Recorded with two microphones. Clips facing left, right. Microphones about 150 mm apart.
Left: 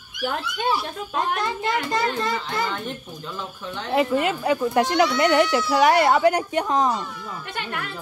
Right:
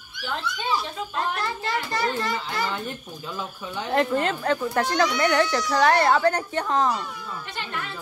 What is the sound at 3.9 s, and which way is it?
A child's voice, 5° left (ahead or behind).